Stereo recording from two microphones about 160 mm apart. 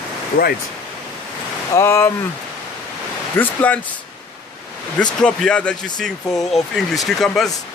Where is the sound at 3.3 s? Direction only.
10° left (ahead or behind).